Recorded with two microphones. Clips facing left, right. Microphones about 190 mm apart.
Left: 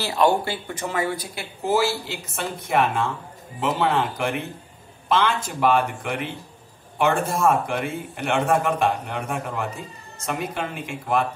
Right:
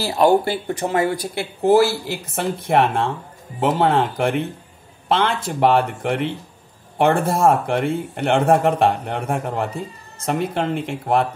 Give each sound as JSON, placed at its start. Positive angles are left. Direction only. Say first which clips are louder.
{"t": 0.0, "sound": "speech", "louder": "right 4 dB", "side_deg": -35}
{"t": 1.3, "sound": "speech", "louder": "right 10 dB", "side_deg": -65}